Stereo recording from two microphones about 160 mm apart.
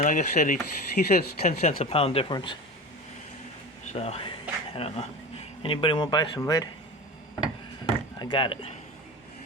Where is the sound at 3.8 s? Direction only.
40° left (ahead or behind); by 6.6 s 25° left (ahead or behind).